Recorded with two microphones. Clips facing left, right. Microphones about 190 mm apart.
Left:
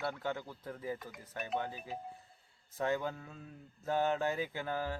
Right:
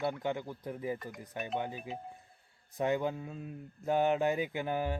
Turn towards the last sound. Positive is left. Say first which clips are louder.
# right 4 dB
turn(degrees=-15)  # may be behind; listen again after turning